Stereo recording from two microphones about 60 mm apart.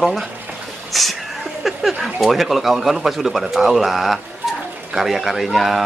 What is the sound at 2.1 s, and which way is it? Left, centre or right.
Speech, centre.